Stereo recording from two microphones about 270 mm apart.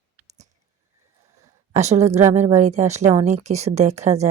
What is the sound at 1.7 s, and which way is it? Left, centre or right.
Speech, right.